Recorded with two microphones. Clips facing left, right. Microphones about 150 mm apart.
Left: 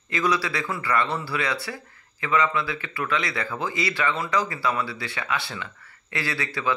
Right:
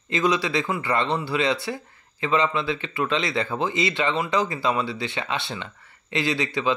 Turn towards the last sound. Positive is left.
turn(degrees=-20)  # may be behind; listen again after turning